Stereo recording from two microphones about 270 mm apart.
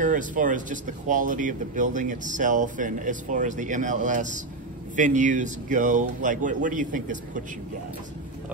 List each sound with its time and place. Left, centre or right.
0.0 s speech: right